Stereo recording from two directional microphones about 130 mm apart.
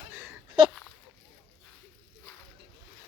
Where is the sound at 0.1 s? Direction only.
15° right (ahead or behind).